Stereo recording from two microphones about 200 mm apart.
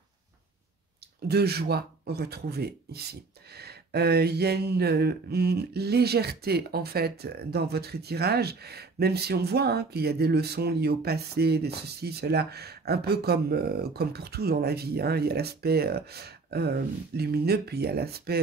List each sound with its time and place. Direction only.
1.2 s speech: 55° right (ahead or behind)